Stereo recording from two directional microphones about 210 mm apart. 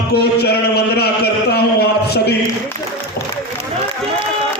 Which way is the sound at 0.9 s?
50° left (ahead or behind).